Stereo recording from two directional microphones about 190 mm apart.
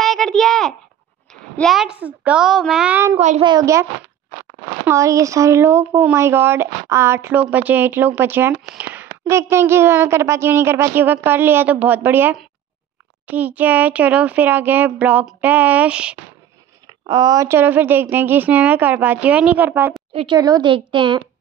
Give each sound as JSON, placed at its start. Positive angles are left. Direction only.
{"t": 0.0, "sound": "a sound", "side_deg": 0}
{"t": 1.6, "sound": "a woman's voice", "side_deg": 0}
{"t": 3.2, "sound": "a woman's voice", "side_deg": -35}
{"t": 3.4, "sound": "speech", "side_deg": -20}
{"t": 4.8, "sound": "speech", "side_deg": -15}
{"t": 16.8, "sound": "speech", "side_deg": -20}
{"t": 20.1, "sound": "speech", "side_deg": -25}